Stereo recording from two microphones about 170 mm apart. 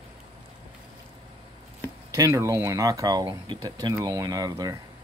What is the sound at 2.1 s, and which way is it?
Speech, 20° right (ahead or behind).